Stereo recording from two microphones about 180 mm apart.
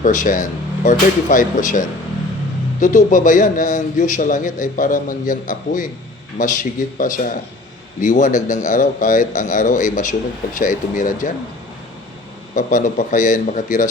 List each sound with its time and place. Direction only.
0.0 s a man's voice: 45° left (ahead or behind)
2.8 s a man's voice: 45° left (ahead or behind)
12.5 s a man's voice: 45° left (ahead or behind)